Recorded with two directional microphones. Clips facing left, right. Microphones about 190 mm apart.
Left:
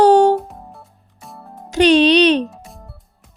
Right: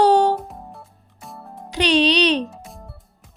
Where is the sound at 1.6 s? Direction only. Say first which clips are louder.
Left 6 dB; 50° left (ahead or behind).